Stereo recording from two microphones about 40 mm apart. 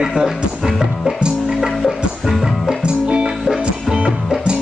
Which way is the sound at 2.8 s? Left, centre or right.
Right.